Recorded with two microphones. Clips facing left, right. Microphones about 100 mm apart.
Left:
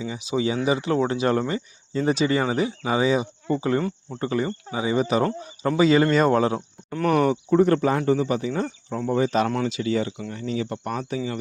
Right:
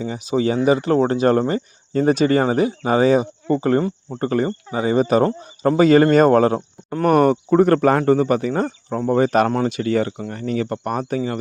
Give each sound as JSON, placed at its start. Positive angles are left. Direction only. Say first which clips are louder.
{"t": 0.0, "sound": "speech", "louder": "right 5 dB", "side_deg": -45}